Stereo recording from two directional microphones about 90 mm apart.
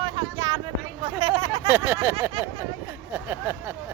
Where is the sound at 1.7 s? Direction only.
25° right (ahead or behind).